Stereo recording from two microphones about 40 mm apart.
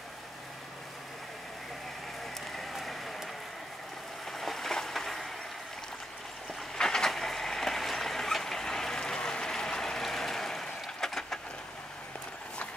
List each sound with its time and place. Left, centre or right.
2.7 s applause: centre
4.3 s a sound: centre
6.8 s train: centre
7.1 s vehicle: centre